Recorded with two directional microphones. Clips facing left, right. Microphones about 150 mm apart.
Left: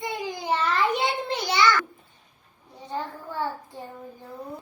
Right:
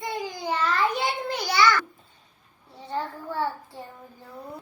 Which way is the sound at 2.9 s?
15° left (ahead or behind).